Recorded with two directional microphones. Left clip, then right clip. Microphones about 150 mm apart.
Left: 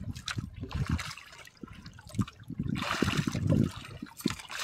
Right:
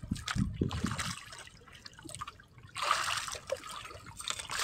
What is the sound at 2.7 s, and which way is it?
Trickle, 40° right (ahead or behind).